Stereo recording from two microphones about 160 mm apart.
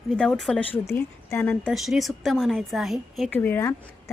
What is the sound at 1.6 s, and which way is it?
A woman's voice, centre (ahead or behind).